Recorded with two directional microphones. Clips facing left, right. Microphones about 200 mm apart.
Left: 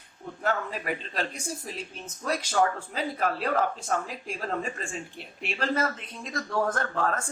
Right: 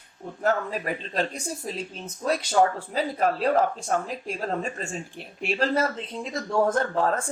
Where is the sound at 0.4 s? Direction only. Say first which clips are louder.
Right 4 dB; 40° right (ahead or behind).